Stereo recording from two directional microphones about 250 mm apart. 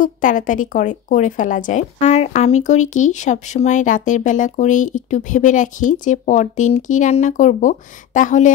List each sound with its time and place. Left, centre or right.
0.0 s a woman's voice: left